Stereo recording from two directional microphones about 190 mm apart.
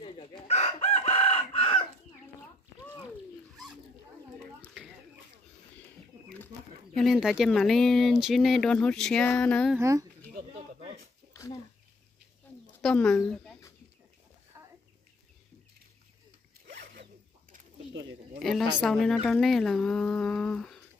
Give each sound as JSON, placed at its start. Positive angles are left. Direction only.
{"t": 0.0, "sound": "chicken", "side_deg": 30}
{"t": 7.0, "sound": "speech", "side_deg": 0}
{"t": 9.8, "sound": "speech", "side_deg": -15}
{"t": 12.8, "sound": "speech", "side_deg": 5}
{"t": 16.8, "sound": "bird", "side_deg": -50}
{"t": 18.4, "sound": "a woman's voice", "side_deg": 0}